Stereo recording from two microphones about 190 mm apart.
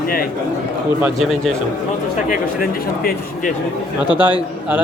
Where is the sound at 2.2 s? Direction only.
45° left (ahead or behind).